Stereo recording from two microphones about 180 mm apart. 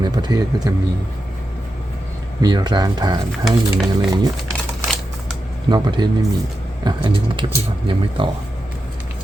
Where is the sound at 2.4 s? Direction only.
20° right (ahead or behind).